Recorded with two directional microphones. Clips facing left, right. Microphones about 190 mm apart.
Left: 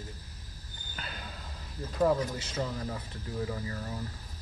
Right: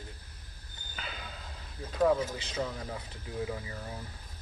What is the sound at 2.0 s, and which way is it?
Speech, 5° right (ahead or behind).